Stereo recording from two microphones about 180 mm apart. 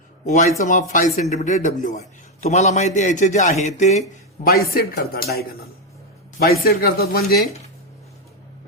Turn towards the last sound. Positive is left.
turn(degrees=60)  # may be behind; listen again after turning